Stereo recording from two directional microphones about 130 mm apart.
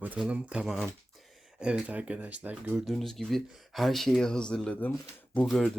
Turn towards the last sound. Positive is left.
turn(degrees=0)  # may be behind; listen again after turning